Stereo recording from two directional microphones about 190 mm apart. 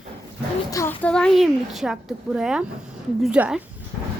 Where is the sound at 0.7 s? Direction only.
15° left (ahead or behind).